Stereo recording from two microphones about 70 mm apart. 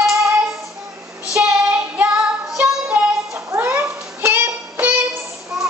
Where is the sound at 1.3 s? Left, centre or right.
Right.